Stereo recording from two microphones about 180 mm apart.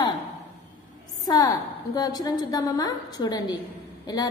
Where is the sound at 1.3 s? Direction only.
20° left (ahead or behind).